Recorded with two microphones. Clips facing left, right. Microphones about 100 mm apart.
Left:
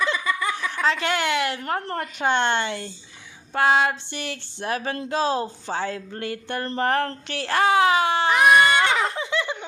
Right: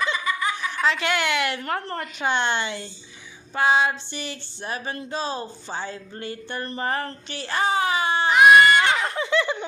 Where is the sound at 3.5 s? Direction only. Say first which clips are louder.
Left 1 dB; 60° left (ahead or behind); by 8.3 s 80° left.